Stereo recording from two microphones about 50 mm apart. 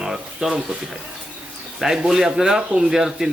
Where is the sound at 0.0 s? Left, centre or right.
Centre.